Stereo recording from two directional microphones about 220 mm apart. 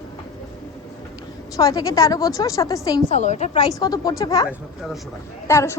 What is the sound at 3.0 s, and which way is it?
Speech, 30° left (ahead or behind).